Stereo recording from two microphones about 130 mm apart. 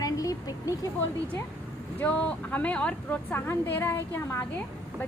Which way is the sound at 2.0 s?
10° left (ahead or behind).